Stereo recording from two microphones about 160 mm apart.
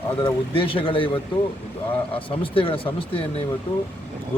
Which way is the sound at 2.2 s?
35° left (ahead or behind).